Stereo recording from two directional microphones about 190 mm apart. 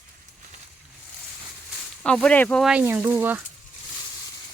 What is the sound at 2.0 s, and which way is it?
Speech, 5° left (ahead or behind).